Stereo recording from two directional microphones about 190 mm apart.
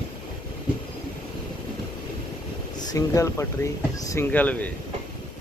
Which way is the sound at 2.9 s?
15° left (ahead or behind).